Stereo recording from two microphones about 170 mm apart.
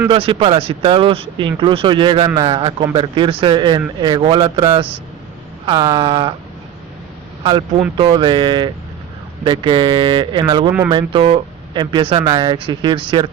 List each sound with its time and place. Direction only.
0.1 s speech: 30° right (ahead or behind)
7.4 s speech: 30° right (ahead or behind)